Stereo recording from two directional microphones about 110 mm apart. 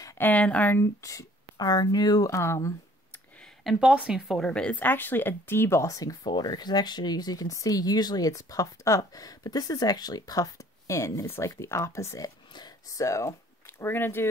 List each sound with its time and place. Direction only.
0.2 s speech: 10° left (ahead or behind)
1.0 s speech: 35° left (ahead or behind)
3.3 s a sound: 5° left (ahead or behind)
3.8 s speech: 10° right (ahead or behind)
4.5 s speech: 10° left (ahead or behind); by 12.3 s 25° left (ahead or behind)
12.5 s speech: 35° left (ahead or behind); by 14.3 s 20° left (ahead or behind)